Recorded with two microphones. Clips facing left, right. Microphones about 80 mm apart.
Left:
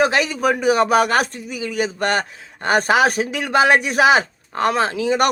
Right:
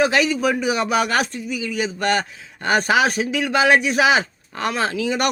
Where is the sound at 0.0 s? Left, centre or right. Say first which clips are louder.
Even; left.